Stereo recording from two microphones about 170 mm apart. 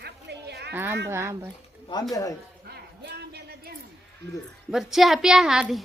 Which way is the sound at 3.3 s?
70° right (ahead or behind).